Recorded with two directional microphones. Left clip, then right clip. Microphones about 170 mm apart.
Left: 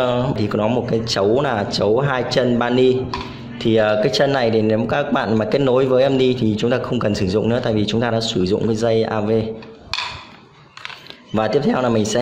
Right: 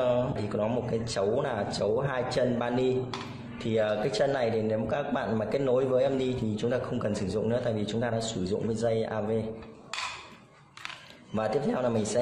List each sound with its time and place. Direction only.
0.0 s a man's voice: 45° left (ahead or behind)
11.3 s a man's voice: 45° left (ahead or behind)